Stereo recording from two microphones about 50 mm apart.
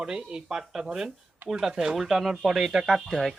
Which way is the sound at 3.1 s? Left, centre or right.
Centre.